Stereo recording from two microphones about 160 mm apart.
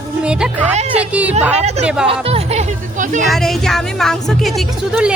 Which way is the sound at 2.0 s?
35° right (ahead or behind).